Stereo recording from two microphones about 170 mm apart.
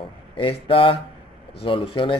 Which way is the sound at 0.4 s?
30° left (ahead or behind).